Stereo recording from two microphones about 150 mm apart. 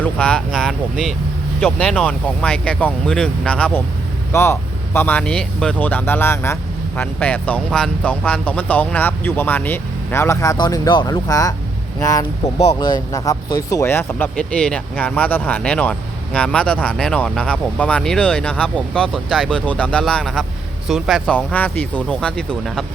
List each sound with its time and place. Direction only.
0.0 s speech: 5° left (ahead or behind)